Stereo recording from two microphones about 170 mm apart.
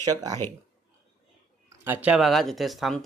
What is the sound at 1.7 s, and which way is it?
Speech, 10° right (ahead or behind).